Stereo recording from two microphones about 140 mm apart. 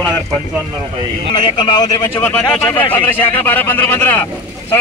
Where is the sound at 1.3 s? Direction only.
30° left (ahead or behind).